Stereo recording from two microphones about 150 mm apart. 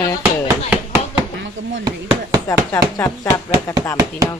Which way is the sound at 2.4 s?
20° left (ahead or behind).